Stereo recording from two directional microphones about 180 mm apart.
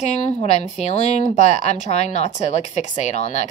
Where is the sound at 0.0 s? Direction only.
40° left (ahead or behind).